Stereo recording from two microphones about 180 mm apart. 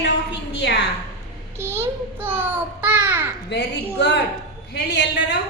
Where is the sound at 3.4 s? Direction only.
70° left (ahead or behind).